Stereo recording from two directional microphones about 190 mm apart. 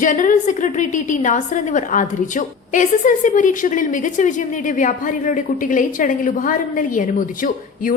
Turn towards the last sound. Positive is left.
turn(degrees=45)  # may be behind; listen again after turning